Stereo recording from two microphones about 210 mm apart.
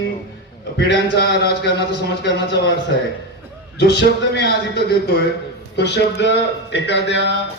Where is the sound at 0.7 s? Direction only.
55° left (ahead or behind).